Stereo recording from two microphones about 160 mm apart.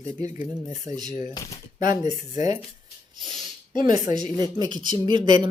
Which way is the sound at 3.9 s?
25° right (ahead or behind).